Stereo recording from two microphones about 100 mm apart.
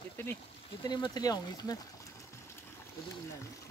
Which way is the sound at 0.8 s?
45° left (ahead or behind).